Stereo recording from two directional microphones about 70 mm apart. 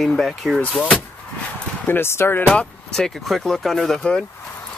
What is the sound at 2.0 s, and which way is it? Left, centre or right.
Speech, left.